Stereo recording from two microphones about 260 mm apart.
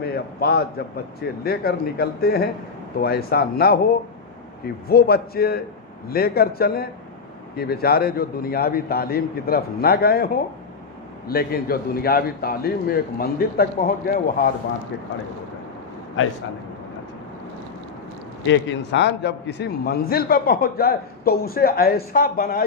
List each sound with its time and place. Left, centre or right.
0.0 s a man's voice: left
11.3 s a man's voice: left
18.4 s a man's voice: left